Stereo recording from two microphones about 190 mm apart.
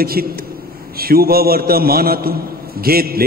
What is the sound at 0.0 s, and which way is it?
A man's voice, 50° right (ahead or behind).